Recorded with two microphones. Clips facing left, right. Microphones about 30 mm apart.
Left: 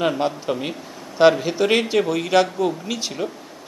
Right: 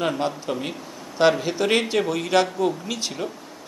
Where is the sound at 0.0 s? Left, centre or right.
Centre.